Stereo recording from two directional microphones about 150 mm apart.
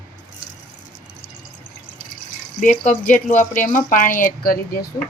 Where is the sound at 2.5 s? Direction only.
60° left (ahead or behind); by 4.8 s 80° left.